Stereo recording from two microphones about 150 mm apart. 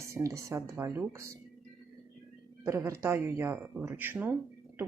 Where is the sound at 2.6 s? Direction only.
20° right (ahead or behind).